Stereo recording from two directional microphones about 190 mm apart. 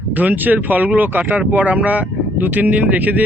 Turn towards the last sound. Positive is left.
turn(degrees=-10)  # may be behind; listen again after turning